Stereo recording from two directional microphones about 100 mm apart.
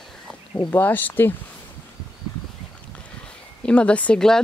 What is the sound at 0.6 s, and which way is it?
Speech, 15° left (ahead or behind).